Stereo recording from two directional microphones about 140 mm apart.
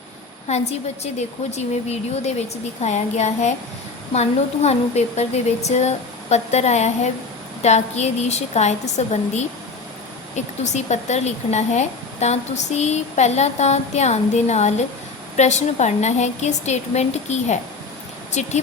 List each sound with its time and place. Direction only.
0.4 s a woman's voice: 50° left (ahead or behind)